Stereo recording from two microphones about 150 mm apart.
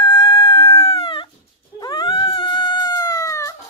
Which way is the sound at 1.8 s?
30° left (ahead or behind).